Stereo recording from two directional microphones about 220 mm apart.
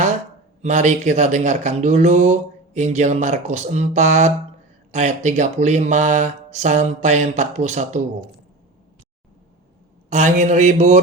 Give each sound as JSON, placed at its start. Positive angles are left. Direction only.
{"t": 0.6, "sound": "speech", "side_deg": -30}
{"t": 10.1, "sound": "speech", "side_deg": -35}